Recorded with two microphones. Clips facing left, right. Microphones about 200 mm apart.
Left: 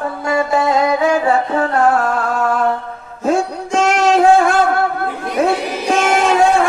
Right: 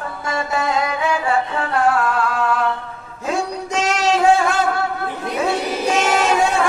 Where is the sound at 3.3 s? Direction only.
50° left (ahead or behind).